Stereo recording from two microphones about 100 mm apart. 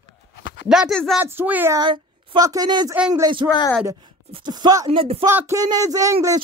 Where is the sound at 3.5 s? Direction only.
40° left (ahead or behind).